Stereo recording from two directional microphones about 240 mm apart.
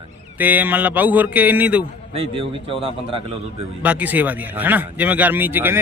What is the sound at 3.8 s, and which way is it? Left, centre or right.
Speech, centre.